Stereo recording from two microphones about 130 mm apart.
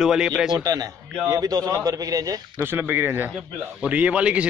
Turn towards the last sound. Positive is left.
turn(degrees=-10)  # may be behind; listen again after turning